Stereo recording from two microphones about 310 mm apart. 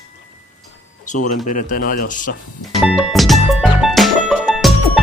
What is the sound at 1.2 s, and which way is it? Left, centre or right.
Speech, left.